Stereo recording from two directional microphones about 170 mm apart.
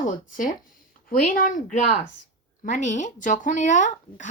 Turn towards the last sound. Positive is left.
turn(degrees=45)  # may be behind; listen again after turning